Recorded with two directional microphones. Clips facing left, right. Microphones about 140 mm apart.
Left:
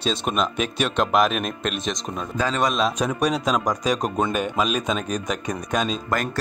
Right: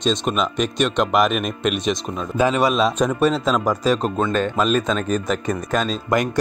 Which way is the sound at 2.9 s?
10° left (ahead or behind).